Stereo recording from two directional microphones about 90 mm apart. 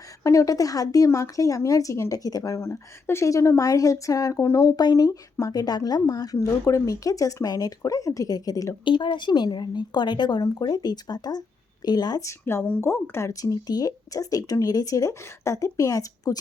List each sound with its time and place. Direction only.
0.2 s speech: 35° left (ahead or behind)
4.8 s speech: 45° left (ahead or behind)
8.8 s speech: 65° left (ahead or behind); by 12.2 s 50° left (ahead or behind)
12.2 s speech: 30° left (ahead or behind)
13.4 s speech: 45° left (ahead or behind)